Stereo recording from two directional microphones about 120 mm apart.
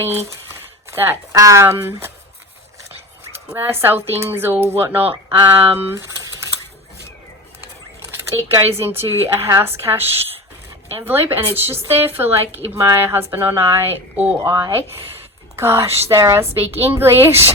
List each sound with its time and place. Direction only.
0.0 s a woman's voice: 20° right (ahead or behind)
3.5 s a woman's voice: 20° right (ahead or behind)
8.3 s a woman's voice: 20° right (ahead or behind)